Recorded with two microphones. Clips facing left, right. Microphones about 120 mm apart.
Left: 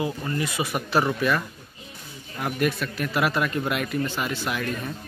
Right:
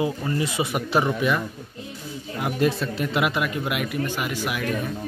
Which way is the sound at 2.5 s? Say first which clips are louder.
Right 3 dB; 25° right (ahead or behind).